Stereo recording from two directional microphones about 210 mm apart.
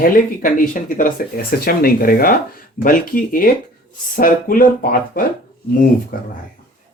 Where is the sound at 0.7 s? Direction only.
40° left (ahead or behind).